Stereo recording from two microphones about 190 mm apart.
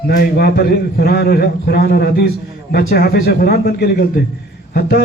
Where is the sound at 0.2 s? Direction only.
55° left (ahead or behind).